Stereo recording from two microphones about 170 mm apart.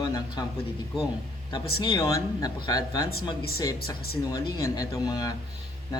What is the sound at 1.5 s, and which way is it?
Speech, 25° left (ahead or behind).